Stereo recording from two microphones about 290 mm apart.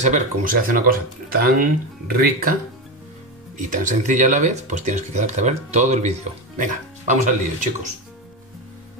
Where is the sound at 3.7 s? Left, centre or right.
Right.